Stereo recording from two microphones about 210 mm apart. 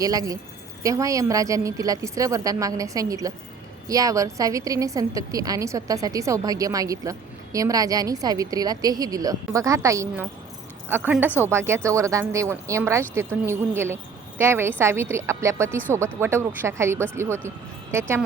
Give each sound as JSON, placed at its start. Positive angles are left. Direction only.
{"t": 0.0, "sound": "a woman's voice", "side_deg": -15}